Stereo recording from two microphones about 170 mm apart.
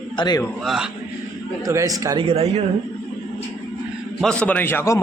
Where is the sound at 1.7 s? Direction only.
20° right (ahead or behind).